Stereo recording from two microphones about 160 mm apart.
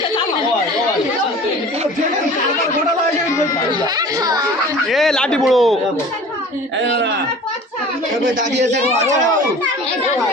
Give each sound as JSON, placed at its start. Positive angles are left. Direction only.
{"t": 3.7, "sound": "children playing", "side_deg": -25}
{"t": 4.9, "sound": "a man's voice", "side_deg": 0}
{"t": 6.8, "sound": "speech", "side_deg": -90}
{"t": 8.5, "sound": "speech", "side_deg": -90}